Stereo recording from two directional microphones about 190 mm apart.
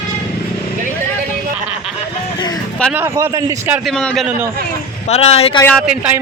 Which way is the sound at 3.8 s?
5° left (ahead or behind).